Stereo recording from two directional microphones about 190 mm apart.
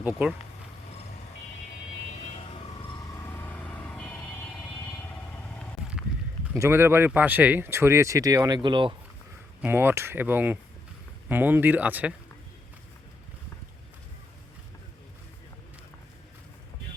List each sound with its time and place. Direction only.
0.2 s speech: 10° right (ahead or behind)
2.0 s vehicle: 35° left (ahead or behind)
3.2 s vehicle: 10° left (ahead or behind)
6.5 s speech: 15° right (ahead or behind)
9.6 s speech: 10° right (ahead or behind)